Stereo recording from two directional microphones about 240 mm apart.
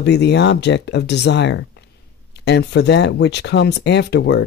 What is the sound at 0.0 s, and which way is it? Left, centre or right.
Speech, left.